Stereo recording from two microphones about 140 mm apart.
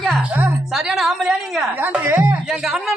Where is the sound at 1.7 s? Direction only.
15° right (ahead or behind).